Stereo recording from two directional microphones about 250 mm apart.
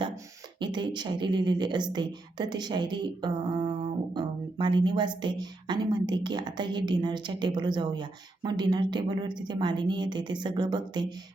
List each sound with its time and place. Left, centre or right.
0.6 s speech: centre